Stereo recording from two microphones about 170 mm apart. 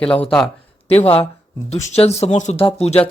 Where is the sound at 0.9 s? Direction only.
35° left (ahead or behind).